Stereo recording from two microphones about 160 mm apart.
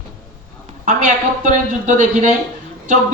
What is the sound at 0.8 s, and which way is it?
Speech, 50° right (ahead or behind).